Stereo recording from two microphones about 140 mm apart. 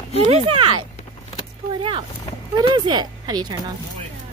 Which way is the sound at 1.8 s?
35° right (ahead or behind).